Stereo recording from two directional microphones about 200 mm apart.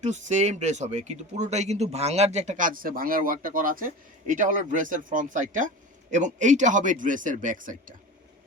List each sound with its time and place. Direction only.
0.0 s speech: 35° right (ahead or behind)